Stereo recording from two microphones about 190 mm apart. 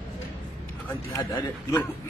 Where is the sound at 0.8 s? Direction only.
15° left (ahead or behind).